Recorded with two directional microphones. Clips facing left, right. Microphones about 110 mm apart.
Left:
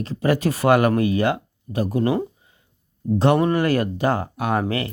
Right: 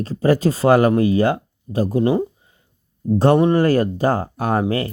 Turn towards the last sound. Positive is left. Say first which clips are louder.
# right 2 dB
turn(degrees=-35)  # may be behind; listen again after turning